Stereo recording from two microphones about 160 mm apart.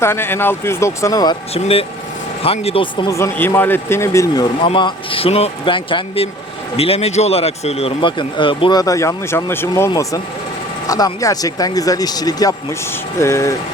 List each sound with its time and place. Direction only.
0.0 s speech: 15° left (ahead or behind)
1.5 s speech: 40° left (ahead or behind)
3.1 s speech: 15° left (ahead or behind)
4.6 s speech: 30° left (ahead or behind)